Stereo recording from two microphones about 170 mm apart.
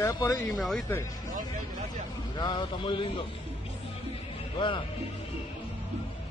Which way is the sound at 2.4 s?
25° left (ahead or behind).